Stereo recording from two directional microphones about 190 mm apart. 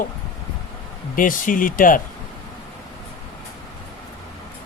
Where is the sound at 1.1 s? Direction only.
45° left (ahead or behind).